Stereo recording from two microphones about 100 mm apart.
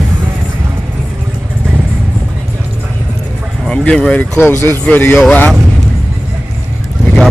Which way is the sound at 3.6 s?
10° left (ahead or behind).